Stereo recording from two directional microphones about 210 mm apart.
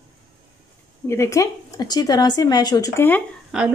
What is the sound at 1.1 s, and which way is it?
A woman's voice, 15° left (ahead or behind).